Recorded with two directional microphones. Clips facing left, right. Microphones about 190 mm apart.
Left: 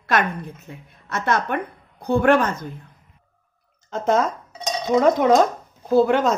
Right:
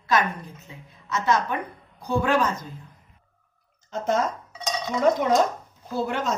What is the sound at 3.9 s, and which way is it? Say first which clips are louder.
Speech: left 4 dB; 90° left.